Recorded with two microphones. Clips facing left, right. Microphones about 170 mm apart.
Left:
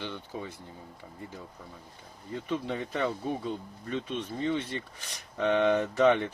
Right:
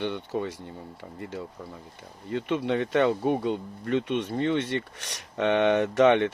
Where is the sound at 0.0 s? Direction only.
65° right (ahead or behind).